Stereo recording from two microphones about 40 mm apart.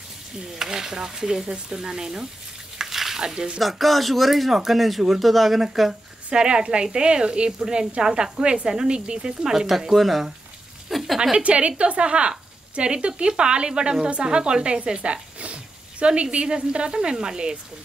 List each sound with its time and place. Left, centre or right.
0.6 s speech: centre
2.8 s frying: centre
3.5 s speech: centre
6.3 s a woman's voice: right
9.4 s speech: centre
11.3 s a woman's voice: right